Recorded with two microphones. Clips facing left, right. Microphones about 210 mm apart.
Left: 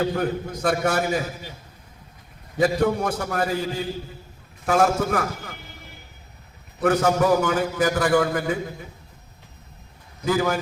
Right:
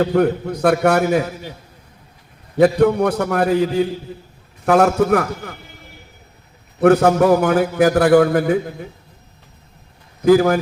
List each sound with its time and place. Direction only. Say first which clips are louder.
0.0 s a man's voice: right 7 dB; 65° right (ahead or behind)
2.7 s a man's voice: right 7 dB; 65° right (ahead or behind)
6.7 s a man's voice: right 7 dB; 60° right (ahead or behind)
10.2 s a man's voice: right 10 dB; 55° right (ahead or behind)